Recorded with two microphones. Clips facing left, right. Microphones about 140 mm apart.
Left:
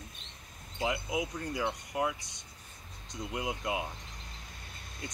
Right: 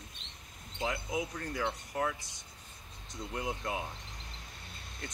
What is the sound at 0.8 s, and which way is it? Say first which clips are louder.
Speech: left 2 dB; 10° left (ahead or behind).